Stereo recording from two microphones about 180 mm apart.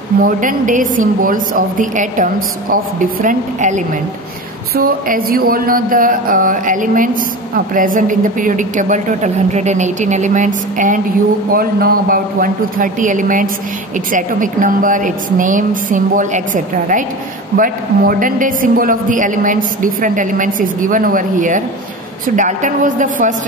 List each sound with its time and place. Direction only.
0.2 s a man's voice: 50° right (ahead or behind)